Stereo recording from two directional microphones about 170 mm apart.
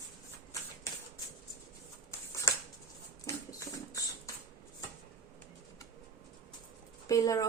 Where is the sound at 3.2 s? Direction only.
20° left (ahead or behind).